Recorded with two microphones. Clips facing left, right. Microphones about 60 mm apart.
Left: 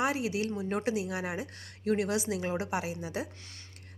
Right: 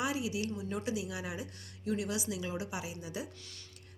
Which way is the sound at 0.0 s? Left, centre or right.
Left.